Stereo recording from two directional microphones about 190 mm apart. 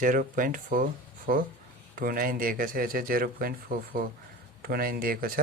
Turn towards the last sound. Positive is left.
turn(degrees=-50)  # may be behind; listen again after turning